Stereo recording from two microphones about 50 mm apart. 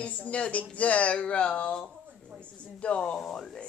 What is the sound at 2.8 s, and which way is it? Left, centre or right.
Speech, left.